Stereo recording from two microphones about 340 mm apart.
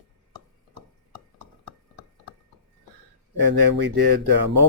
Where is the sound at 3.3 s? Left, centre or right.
Right.